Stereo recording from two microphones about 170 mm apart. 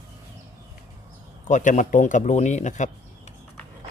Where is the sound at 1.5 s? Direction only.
45° left (ahead or behind).